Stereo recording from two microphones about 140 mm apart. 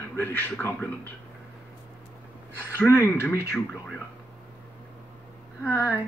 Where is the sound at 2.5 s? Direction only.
15° left (ahead or behind).